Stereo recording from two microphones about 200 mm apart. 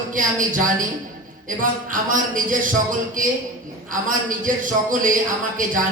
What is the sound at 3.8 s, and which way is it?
A man's voice, 40° right (ahead or behind).